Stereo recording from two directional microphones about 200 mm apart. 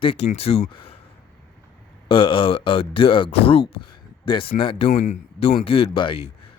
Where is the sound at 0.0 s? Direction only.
30° left (ahead or behind).